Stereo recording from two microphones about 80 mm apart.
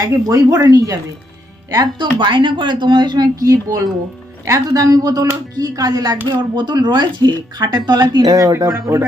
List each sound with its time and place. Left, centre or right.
0.0 s speech: right
1.8 s speech: right
8.5 s speech: right